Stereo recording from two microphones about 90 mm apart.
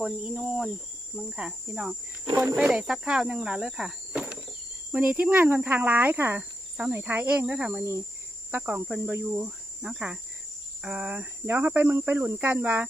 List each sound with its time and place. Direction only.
0.2 s cricket: 10° right (ahead or behind)
1.1 s speech: 5° right (ahead or behind)
2.3 s speech: 30° right (ahead or behind)
2.6 s speech: 10° right (ahead or behind)
4.1 s cricket: 10° right (ahead or behind)
4.9 s speech: 15° right (ahead or behind)
9.2 s cricket: 15° right (ahead or behind)
10.8 s speech: 15° right (ahead or behind)